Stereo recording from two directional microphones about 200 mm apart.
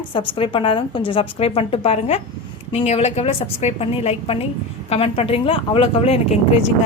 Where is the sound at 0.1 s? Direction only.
25° left (ahead or behind).